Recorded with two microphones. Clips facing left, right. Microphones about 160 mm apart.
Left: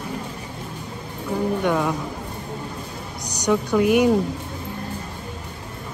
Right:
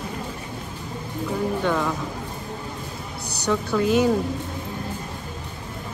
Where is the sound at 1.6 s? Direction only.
15° left (ahead or behind).